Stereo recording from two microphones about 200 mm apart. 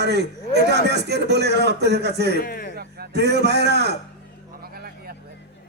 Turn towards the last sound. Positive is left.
turn(degrees=-55)  # may be behind; listen again after turning